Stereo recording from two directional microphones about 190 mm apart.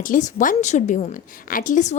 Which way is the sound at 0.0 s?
40° left (ahead or behind).